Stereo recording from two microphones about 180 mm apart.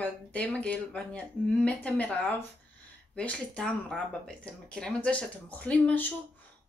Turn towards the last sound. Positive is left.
turn(degrees=10)  # may be behind; listen again after turning